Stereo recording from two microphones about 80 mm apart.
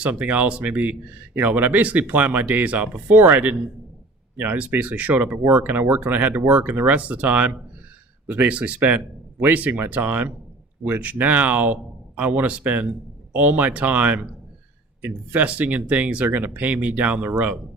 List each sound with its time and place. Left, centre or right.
0.0 s speech: centre